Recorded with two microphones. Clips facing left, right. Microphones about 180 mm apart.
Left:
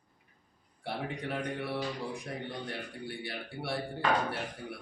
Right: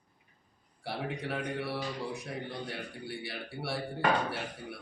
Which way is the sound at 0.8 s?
5° right (ahead or behind).